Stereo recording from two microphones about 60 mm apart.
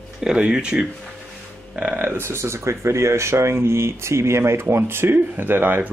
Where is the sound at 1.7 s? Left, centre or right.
Right.